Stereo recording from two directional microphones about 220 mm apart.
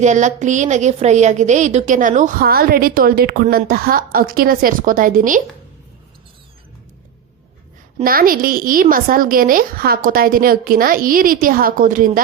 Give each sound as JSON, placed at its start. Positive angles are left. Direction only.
{"t": 0.0, "sound": "a woman's voice", "side_deg": -35}
{"t": 8.0, "sound": "a woman's voice", "side_deg": -40}